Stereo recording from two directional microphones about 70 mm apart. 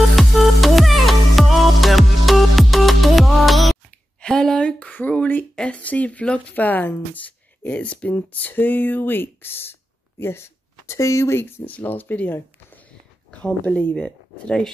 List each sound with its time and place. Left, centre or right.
0.1 s music: centre
3.9 s a sound: centre
5.6 s speech: centre